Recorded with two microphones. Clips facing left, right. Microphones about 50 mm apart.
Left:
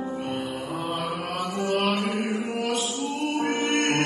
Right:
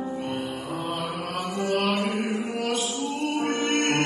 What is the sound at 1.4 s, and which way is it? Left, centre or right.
Chant, left.